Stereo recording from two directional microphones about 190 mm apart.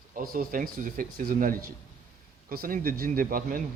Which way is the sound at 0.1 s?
45° right (ahead or behind).